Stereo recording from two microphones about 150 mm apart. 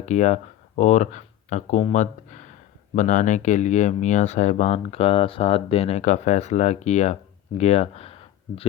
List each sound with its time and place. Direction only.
0.0 s speech: 50° left (ahead or behind)